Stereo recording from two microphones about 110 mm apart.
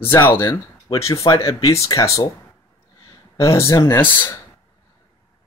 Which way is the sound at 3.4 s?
25° left (ahead or behind).